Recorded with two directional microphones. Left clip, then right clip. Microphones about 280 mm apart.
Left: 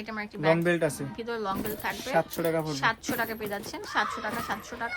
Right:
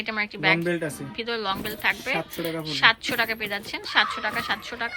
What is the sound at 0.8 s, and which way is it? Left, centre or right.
A woman's voice, centre.